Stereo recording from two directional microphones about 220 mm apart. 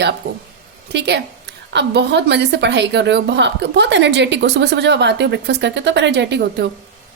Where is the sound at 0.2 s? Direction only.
45° right (ahead or behind).